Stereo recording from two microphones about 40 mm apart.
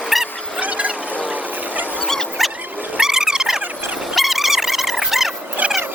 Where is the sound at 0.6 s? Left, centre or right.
Right.